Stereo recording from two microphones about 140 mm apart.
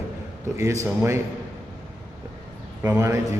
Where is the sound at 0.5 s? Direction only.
20° right (ahead or behind).